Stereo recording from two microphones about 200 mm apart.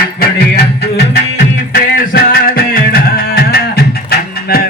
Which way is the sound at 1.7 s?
50° left (ahead or behind).